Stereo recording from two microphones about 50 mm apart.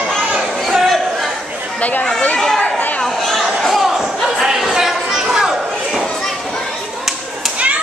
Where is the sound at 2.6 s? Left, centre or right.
Left.